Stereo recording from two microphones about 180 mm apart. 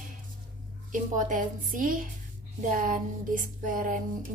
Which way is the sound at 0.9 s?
45° right (ahead or behind).